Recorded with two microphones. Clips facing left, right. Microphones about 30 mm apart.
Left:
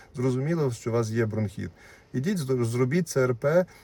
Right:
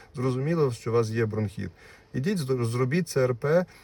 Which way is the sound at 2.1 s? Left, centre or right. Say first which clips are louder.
Even; right.